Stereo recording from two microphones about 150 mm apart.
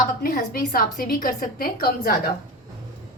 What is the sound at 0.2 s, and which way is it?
A woman's voice, 80° left.